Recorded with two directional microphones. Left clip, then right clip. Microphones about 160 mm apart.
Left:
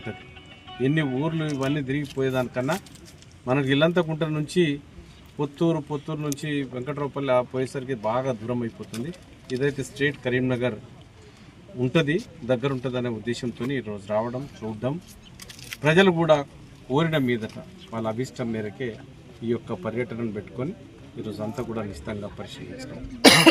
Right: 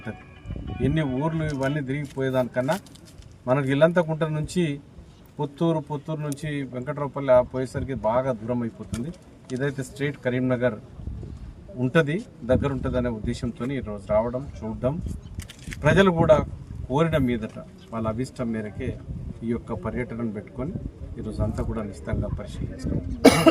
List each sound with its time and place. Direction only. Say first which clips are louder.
0.8 s speech: left 1 dB; 20° right (ahead or behind)
11.8 s speech: right 1 dB; 25° right (ahead or behind)
15.7 s speech: even; 20° right (ahead or behind)
23.2 s cough: left 2 dB; 15° right (ahead or behind)